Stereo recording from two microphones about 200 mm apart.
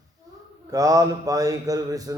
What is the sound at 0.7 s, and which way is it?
Speech, 15° right (ahead or behind).